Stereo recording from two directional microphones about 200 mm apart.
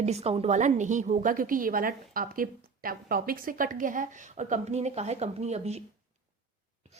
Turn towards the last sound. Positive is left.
turn(degrees=-35)  # may be behind; listen again after turning